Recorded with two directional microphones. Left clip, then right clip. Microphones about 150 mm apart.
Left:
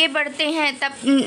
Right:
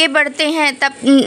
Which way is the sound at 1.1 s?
20° right (ahead or behind).